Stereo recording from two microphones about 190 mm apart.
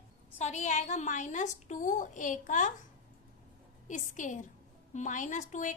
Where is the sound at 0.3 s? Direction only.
35° left (ahead or behind).